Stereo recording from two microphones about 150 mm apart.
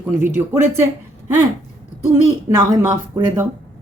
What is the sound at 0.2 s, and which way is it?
Speech, 15° right (ahead or behind).